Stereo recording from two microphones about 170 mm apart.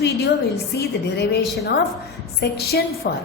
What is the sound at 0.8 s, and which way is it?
Speech, 85° left.